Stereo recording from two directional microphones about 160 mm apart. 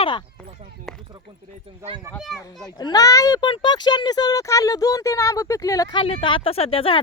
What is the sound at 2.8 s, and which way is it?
Speech, 25° left (ahead or behind).